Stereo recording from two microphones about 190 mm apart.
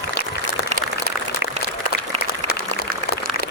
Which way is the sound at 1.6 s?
35° right (ahead or behind).